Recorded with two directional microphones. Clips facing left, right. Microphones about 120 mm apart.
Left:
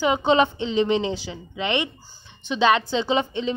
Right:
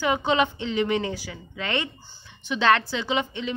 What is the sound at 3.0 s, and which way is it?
Speech, 30° left (ahead or behind).